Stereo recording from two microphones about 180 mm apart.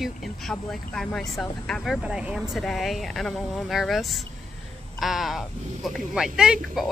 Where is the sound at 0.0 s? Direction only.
Centre (ahead or behind).